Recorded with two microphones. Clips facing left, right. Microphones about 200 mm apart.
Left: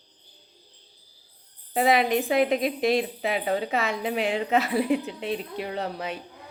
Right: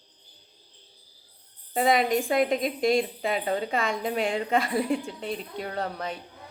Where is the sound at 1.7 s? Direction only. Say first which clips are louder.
Left 1 dB; 5° left (ahead or behind).